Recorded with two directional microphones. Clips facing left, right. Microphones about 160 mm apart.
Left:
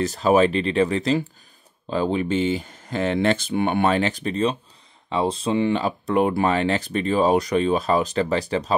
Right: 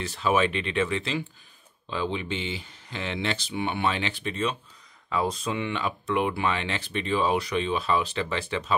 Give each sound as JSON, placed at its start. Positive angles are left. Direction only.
{"t": 0.0, "sound": "speech", "side_deg": 40}